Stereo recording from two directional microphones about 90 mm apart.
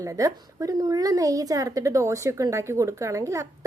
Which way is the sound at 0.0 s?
40° right (ahead or behind).